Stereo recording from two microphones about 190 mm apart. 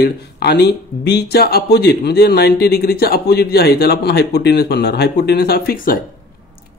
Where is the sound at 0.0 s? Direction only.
60° left (ahead or behind).